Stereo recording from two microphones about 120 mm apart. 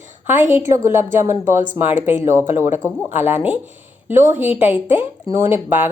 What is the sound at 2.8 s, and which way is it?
Speech, 15° right (ahead or behind).